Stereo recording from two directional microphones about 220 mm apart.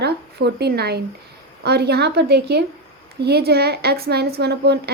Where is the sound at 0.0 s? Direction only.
45° right (ahead or behind).